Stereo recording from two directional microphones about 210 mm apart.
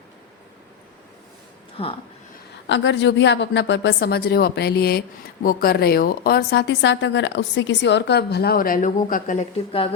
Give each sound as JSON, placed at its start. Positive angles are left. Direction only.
{"t": 1.8, "sound": "speech", "side_deg": 25}
{"t": 2.6, "sound": "a woman's voice", "side_deg": 60}